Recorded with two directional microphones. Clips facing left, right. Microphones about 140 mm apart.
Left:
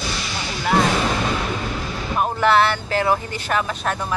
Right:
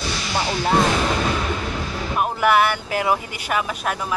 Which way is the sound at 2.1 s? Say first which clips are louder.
Left 1 dB; 5° right (ahead or behind).